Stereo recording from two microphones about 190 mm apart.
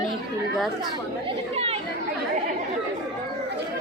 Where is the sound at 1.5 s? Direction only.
30° right (ahead or behind).